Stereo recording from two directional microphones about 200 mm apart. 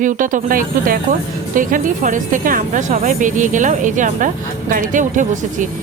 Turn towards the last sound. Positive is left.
turn(degrees=-40)  # may be behind; listen again after turning